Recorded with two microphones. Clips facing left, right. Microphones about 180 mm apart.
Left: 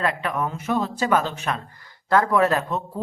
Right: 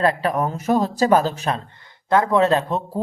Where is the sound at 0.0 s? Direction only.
35° right (ahead or behind).